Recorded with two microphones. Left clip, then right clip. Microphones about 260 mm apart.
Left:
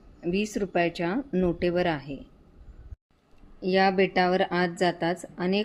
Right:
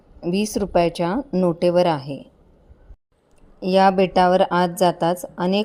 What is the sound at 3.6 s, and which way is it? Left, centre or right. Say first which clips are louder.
Speech: right 7 dB; right.